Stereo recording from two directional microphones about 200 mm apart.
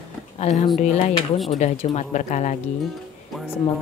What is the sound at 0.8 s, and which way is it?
Speech, 35° left (ahead or behind).